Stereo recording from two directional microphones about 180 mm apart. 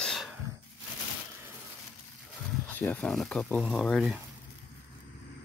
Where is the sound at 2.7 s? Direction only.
10° left (ahead or behind).